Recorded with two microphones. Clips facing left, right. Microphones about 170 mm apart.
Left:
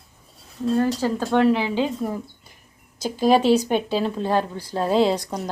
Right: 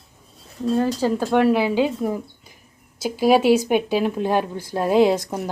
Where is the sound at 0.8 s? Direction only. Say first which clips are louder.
Right 2 dB; 15° right (ahead or behind).